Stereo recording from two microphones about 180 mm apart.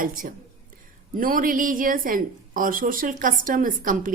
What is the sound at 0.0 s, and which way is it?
A woman's voice, 50° right (ahead or behind).